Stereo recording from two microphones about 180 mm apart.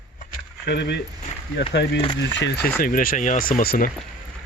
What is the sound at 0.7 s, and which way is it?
Speech, 70° left (ahead or behind).